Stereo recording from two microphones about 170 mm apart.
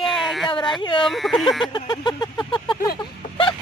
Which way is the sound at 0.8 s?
30° left (ahead or behind).